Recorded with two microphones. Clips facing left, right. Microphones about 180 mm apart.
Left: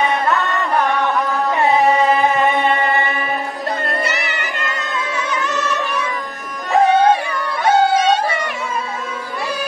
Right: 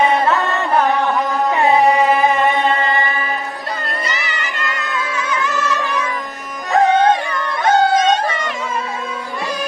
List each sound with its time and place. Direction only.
3.9 s music: 65° left (ahead or behind)
5.5 s music: 20° left (ahead or behind)
6.7 s music: 10° left (ahead or behind)